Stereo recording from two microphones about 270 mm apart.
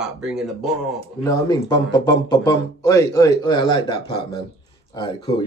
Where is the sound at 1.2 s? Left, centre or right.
Centre.